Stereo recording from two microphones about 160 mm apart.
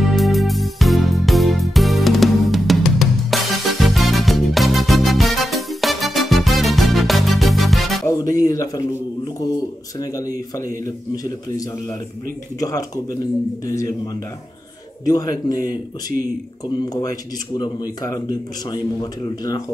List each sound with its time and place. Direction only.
0.0 s music: centre (ahead or behind)
8.1 s music: 20° left (ahead or behind)
12.5 s speech: 20° left (ahead or behind)
15.0 s speech: 25° left (ahead or behind)
15.5 s speech: 65° right (ahead or behind)
16.8 s speech: 25° left (ahead or behind)